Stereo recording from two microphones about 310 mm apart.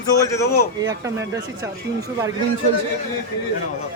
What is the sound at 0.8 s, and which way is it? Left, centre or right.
Speech, centre.